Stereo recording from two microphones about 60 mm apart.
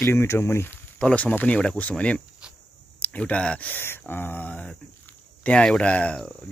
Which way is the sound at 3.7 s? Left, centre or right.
Left.